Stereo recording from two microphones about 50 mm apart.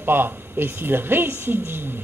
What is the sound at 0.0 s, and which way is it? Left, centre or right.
A man's voice, right.